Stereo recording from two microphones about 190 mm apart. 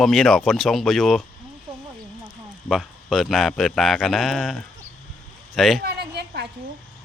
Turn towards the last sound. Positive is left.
turn(degrees=-60)  # may be behind; listen again after turning